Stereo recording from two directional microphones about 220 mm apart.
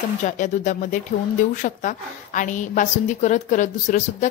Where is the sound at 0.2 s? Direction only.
35° left (ahead or behind).